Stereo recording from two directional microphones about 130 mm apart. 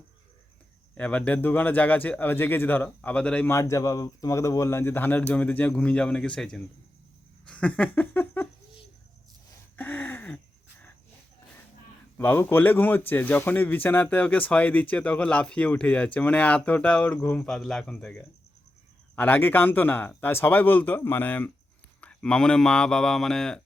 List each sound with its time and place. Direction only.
0.9 s speech: 10° left (ahead or behind)
3.5 s speech: 25° left (ahead or behind); by 6.6 s 5° left (ahead or behind)
7.4 s a sound: 10° left (ahead or behind)
9.7 s gasp: 15° left (ahead or behind)
12.1 s speech: 15° left (ahead or behind)